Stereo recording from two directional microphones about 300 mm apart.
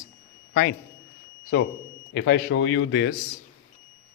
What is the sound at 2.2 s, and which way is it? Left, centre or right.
Speech, left.